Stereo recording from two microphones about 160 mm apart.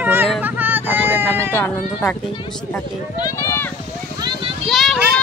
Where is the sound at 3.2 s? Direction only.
20° left (ahead or behind).